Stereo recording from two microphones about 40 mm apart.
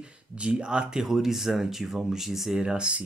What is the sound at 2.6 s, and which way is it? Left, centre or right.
Speech, right.